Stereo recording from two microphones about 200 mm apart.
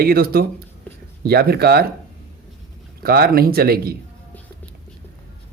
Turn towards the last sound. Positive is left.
turn(degrees=-50)  # may be behind; listen again after turning